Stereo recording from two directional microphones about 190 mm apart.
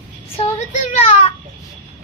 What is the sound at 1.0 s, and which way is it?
Speech, 35° left (ahead or behind).